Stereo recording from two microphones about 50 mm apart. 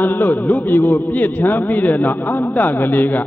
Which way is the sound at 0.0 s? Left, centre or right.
Left.